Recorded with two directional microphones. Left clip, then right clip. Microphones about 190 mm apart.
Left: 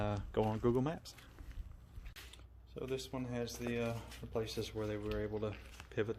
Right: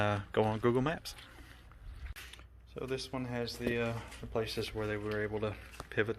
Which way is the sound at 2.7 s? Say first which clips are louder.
Right 3 dB; 5° left (ahead or behind).